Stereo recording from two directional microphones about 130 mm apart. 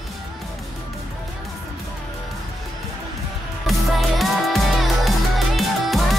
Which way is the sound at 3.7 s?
Centre (ahead or behind).